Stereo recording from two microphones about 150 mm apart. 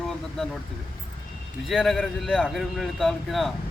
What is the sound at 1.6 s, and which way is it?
A man's voice, centre (ahead or behind).